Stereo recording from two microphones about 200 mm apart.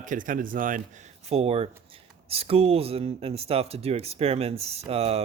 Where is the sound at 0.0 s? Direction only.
40° right (ahead or behind).